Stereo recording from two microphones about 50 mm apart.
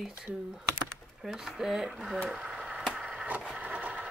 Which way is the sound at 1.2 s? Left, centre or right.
Centre.